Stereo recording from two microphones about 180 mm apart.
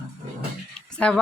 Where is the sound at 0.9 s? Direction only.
5° left (ahead or behind).